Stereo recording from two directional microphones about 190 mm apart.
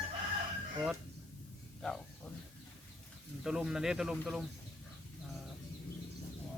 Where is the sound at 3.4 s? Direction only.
5° right (ahead or behind).